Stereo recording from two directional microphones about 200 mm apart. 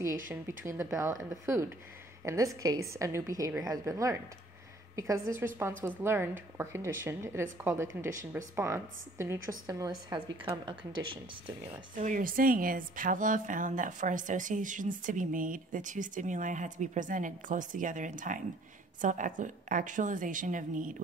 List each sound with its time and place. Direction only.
0.3 s a woman's voice: 15° right (ahead or behind)
11.9 s a woman's voice: 40° right (ahead or behind)